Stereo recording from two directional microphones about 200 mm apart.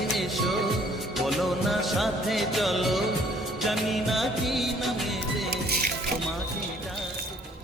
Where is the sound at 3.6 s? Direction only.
Centre (ahead or behind).